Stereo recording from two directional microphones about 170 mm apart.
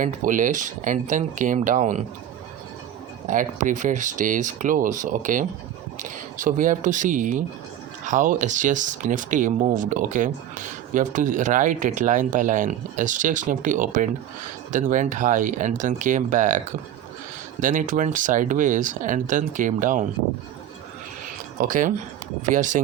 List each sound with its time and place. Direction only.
0.0 s speech: 50° right (ahead or behind)
3.2 s speech: 50° right (ahead or behind)
17.6 s speech: 50° right (ahead or behind)
21.6 s speech: 50° right (ahead or behind)